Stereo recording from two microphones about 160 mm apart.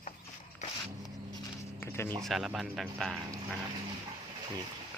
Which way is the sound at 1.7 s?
15° left (ahead or behind).